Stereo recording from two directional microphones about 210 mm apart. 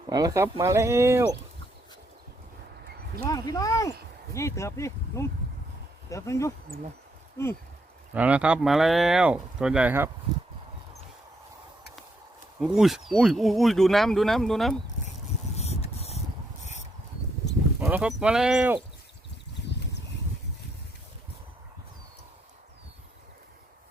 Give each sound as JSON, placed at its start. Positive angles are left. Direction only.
{"t": 0.1, "sound": "speech", "side_deg": -15}
{"t": 3.2, "sound": "speech", "side_deg": 15}
{"t": 8.1, "sound": "speech", "side_deg": -5}
{"t": 12.5, "sound": "speech", "side_deg": 0}
{"t": 15.5, "sound": "a sound", "side_deg": 30}
{"t": 17.7, "sound": "speech", "side_deg": -10}